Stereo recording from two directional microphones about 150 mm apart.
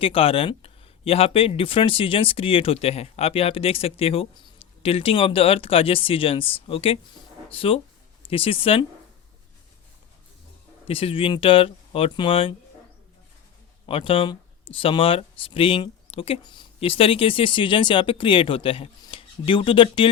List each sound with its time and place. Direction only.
0.0 s speech: 40° left (ahead or behind)
10.8 s speech: 40° left (ahead or behind)
13.8 s speech: 35° left (ahead or behind)